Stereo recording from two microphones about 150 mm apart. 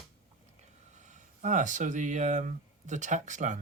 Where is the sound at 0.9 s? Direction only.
55° right (ahead or behind).